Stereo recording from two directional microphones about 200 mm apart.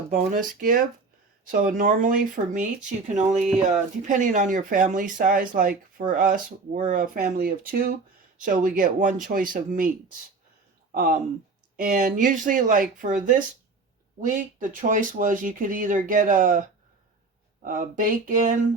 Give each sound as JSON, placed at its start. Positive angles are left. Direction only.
{"t": 0.1, "sound": "speech", "side_deg": -45}
{"t": 10.9, "sound": "speech", "side_deg": -45}